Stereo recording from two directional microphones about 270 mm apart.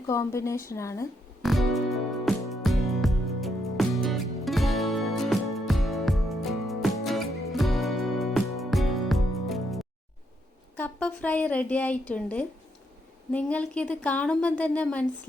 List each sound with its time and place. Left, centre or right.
0.1 s a woman's voice: centre
1.4 s music: centre
10.8 s a woman's voice: centre